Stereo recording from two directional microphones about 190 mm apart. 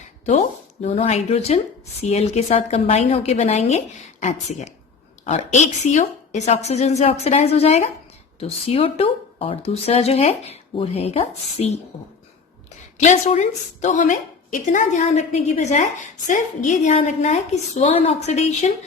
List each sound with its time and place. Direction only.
0.3 s a woman's voice: 40° left (ahead or behind)
13.0 s a woman's voice: 35° left (ahead or behind)